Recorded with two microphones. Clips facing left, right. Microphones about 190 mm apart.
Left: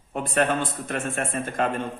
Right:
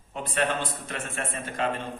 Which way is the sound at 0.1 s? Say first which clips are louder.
Left 6 dB; 50° left (ahead or behind).